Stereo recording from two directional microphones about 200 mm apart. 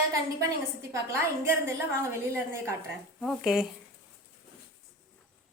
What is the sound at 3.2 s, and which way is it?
Speech, centre (ahead or behind).